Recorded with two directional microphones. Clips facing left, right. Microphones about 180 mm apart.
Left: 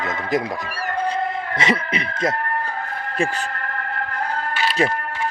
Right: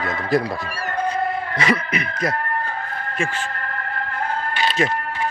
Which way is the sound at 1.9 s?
30° left (ahead or behind).